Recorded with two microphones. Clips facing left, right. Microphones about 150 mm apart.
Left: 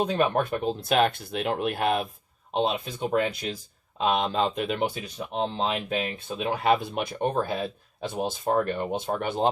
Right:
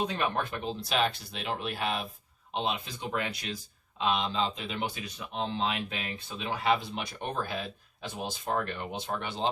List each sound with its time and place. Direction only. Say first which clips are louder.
0.3 s speech: left 7 dB; 50° left (ahead or behind)
2.5 s speech: left 6 dB; 40° left (ahead or behind)
2.8 s speech: left 8 dB; 50° left (ahead or behind)